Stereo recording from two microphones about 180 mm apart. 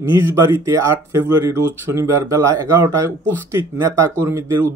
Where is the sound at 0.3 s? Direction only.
15° right (ahead or behind).